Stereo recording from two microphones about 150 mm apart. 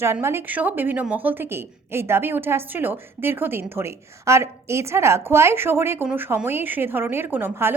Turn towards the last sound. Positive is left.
turn(degrees=-15)  # may be behind; listen again after turning